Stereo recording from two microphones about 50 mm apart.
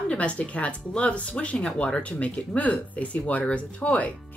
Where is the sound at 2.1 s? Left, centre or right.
Left.